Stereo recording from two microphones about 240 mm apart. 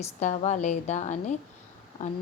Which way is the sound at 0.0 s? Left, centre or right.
Left.